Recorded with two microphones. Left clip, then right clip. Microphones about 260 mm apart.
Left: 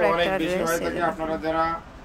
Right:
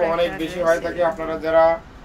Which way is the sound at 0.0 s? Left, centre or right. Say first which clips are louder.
Right 1 dB; left.